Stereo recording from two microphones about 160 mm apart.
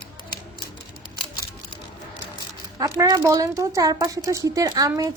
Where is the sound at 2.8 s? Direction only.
25° right (ahead or behind).